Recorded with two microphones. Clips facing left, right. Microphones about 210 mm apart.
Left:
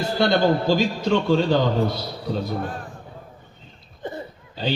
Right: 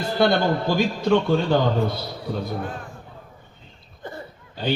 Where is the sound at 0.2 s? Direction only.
55° right (ahead or behind).